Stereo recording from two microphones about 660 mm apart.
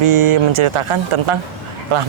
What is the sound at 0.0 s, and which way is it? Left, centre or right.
Speech, right.